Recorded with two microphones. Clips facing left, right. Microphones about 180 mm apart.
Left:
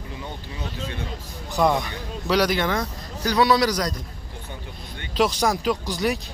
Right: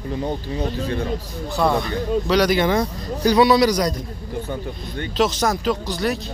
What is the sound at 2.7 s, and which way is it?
Speech, 25° right (ahead or behind).